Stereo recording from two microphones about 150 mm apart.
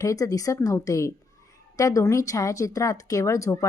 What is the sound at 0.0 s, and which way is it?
Speech, 20° left (ahead or behind).